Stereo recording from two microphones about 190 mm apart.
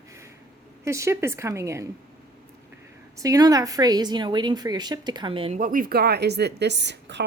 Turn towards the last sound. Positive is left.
turn(degrees=-65)  # may be behind; listen again after turning